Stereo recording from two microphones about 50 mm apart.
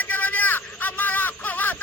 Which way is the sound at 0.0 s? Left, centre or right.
Left.